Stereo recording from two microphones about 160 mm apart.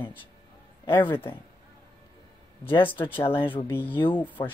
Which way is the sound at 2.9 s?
30° left (ahead or behind).